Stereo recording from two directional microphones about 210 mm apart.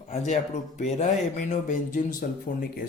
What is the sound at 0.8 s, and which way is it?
Speech, 35° left (ahead or behind).